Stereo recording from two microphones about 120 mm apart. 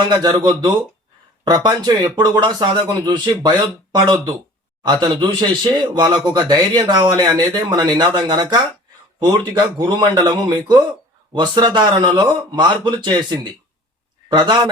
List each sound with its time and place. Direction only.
0.1 s speech: 35° right (ahead or behind)